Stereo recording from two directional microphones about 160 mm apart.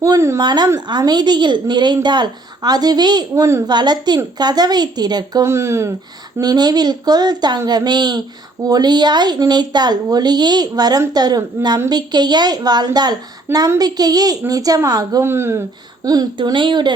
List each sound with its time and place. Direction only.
0.0 s speech: 20° right (ahead or behind)
16.0 s speech: 25° right (ahead or behind)